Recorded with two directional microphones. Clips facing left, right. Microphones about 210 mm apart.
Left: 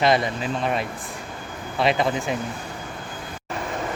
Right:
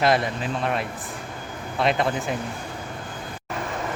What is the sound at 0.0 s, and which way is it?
Speech, centre (ahead or behind).